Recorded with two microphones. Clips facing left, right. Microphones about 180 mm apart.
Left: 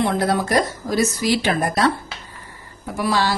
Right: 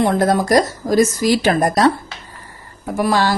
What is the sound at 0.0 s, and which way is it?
A woman's voice, 45° right (ahead or behind).